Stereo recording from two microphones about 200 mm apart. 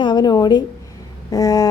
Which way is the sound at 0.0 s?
20° left (ahead or behind).